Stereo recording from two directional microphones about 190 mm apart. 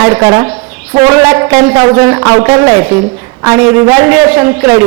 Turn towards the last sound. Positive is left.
turn(degrees=-10)  # may be behind; listen again after turning